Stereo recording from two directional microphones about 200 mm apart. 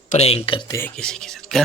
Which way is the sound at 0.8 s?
5° left (ahead or behind).